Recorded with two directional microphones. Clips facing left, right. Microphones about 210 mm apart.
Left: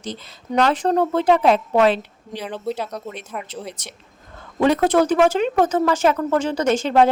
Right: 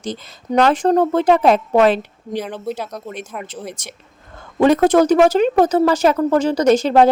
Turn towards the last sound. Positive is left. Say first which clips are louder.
# right 4 dB
turn(degrees=-40)  # may be behind; listen again after turning